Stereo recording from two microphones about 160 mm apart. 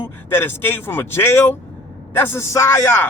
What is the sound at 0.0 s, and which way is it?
A man's voice, 15° left (ahead or behind).